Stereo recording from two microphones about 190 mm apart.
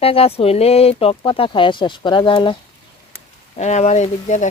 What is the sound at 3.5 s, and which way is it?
Speech, 35° left (ahead or behind).